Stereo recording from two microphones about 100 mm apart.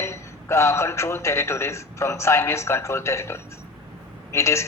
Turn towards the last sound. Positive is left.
turn(degrees=30)  # may be behind; listen again after turning